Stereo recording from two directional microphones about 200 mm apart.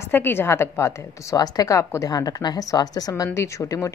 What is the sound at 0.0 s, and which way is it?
A woman's voice, 10° left (ahead or behind).